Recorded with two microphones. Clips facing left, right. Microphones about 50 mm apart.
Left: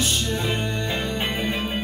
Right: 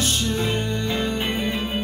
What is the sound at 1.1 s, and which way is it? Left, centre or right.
Music, left.